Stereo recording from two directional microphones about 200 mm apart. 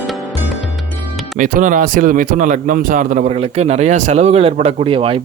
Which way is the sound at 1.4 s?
40° right (ahead or behind).